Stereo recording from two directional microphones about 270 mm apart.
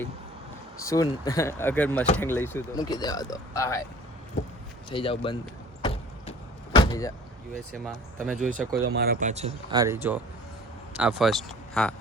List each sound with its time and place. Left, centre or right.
0.8 s speech: centre
4.9 s speech: centre
5.8 s vehicle: left
7.9 s speech: centre
8.7 s speech: right
9.3 s speech: right; by 11.9 s centre